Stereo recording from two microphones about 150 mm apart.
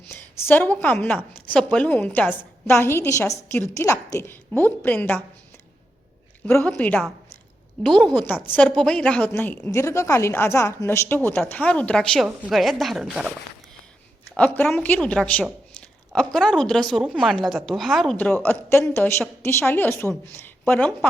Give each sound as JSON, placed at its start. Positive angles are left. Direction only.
{"t": 0.1, "sound": "a woman's voice", "side_deg": 15}
{"t": 6.4, "sound": "a woman's voice", "side_deg": 10}
{"t": 14.3, "sound": "a woman's voice", "side_deg": 10}